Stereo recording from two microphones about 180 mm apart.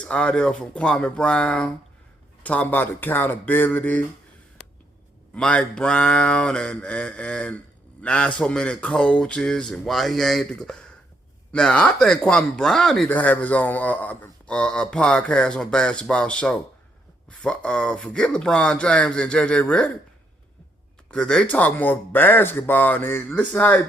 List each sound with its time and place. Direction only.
0.0 s speech: 5° left (ahead or behind)
5.3 s speech: 5° left (ahead or behind)
21.1 s speech: 5° left (ahead or behind)